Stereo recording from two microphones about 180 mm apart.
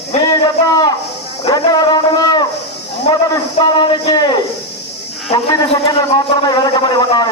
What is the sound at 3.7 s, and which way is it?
A man's voice, 25° left (ahead or behind).